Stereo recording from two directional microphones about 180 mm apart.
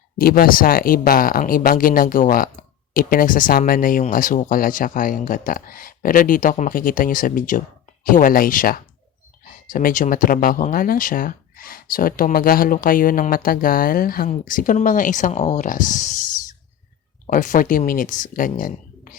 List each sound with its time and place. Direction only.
0.2 s speech: 55° left (ahead or behind)